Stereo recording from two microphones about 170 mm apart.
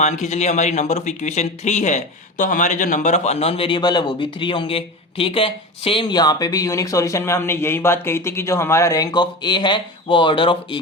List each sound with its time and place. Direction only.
0.0 s speech: 40° left (ahead or behind)